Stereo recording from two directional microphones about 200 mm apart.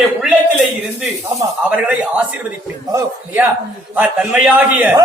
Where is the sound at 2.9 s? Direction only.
15° right (ahead or behind).